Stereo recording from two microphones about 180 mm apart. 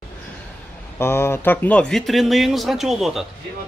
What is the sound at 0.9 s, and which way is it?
Speech, 15° left (ahead or behind).